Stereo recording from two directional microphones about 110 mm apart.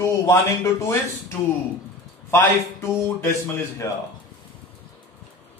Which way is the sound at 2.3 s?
25° left (ahead or behind).